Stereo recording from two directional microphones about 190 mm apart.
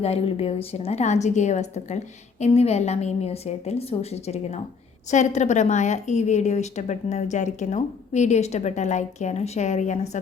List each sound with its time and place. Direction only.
0.0 s a woman's voice: 30° left (ahead or behind)